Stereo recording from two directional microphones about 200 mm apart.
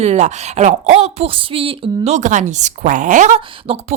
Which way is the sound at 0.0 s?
35° right (ahead or behind).